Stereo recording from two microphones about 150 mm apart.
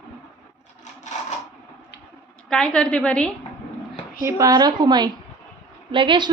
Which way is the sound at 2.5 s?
5° left (ahead or behind).